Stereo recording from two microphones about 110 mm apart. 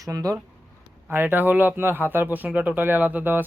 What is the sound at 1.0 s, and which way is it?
A man's voice, 15° right (ahead or behind).